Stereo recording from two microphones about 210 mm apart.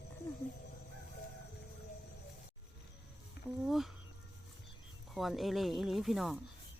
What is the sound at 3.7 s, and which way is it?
Speech, centre (ahead or behind).